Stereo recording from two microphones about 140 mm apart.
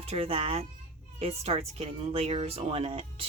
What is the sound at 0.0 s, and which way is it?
Speech, 45° right (ahead or behind).